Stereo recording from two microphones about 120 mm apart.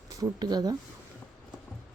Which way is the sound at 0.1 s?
35° right (ahead or behind).